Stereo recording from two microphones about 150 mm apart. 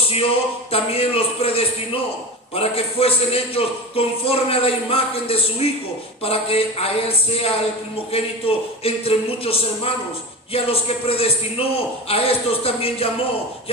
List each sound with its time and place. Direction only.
0.0 s a man's voice: 40° left (ahead or behind)